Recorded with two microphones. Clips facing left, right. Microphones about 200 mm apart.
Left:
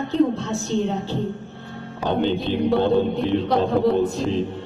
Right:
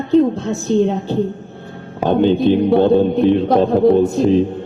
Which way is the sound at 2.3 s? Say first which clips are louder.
Right 8 dB; 50° right (ahead or behind).